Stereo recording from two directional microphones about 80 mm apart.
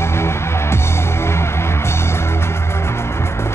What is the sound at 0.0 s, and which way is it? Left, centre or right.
Music, left.